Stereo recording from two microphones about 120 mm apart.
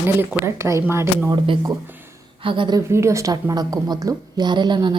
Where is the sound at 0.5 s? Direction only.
25° right (ahead or behind).